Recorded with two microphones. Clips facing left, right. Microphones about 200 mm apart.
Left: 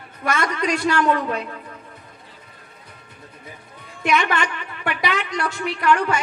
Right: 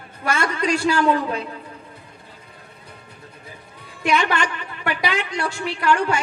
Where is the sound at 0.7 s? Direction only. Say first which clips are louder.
Right 2 dB; 30° right (ahead or behind).